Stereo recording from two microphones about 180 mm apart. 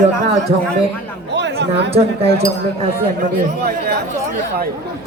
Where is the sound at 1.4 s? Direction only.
75° right (ahead or behind).